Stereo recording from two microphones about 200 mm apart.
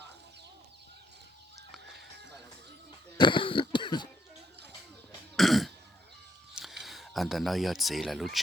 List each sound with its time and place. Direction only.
3.2 s cough: 25° left (ahead or behind)
5.4 s throat clearing: centre (ahead or behind)
6.8 s speech: centre (ahead or behind)